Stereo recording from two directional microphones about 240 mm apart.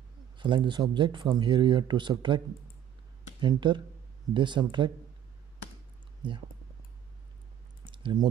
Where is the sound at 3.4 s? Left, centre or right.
Centre.